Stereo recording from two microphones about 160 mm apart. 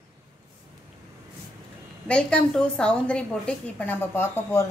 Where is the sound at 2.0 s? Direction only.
5° left (ahead or behind).